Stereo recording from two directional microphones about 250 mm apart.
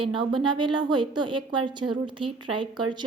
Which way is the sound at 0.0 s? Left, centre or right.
Centre.